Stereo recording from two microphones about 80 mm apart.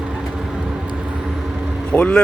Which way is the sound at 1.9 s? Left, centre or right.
Centre.